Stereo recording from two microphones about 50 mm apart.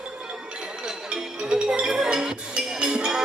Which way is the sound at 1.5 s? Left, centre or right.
Centre.